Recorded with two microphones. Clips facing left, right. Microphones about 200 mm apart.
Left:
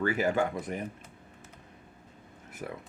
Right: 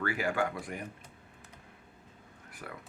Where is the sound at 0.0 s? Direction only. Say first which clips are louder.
Left 4 dB; 20° left (ahead or behind).